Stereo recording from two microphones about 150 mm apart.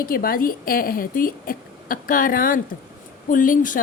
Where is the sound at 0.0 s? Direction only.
75° left (ahead or behind).